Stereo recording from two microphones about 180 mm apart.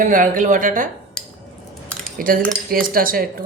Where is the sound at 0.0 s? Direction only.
45° right (ahead or behind).